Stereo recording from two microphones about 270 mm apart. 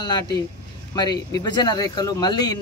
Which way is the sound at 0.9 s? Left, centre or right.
Centre.